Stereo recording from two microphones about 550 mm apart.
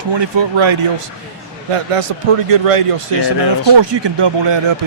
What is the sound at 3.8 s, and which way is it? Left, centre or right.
Speech, right.